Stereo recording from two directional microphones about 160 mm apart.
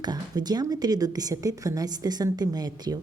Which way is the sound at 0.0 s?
25° right (ahead or behind).